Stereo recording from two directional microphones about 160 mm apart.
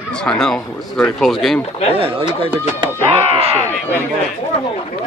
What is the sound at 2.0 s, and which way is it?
Speech, 35° right (ahead or behind).